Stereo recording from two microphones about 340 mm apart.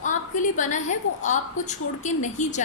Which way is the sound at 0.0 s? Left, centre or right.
Left.